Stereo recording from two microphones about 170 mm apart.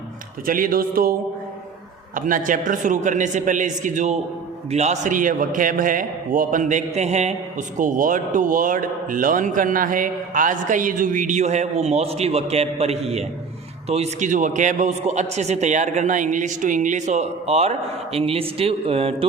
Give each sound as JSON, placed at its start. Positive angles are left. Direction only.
{"t": 0.4, "sound": "speech", "side_deg": -55}
{"t": 2.1, "sound": "a man's voice", "side_deg": -50}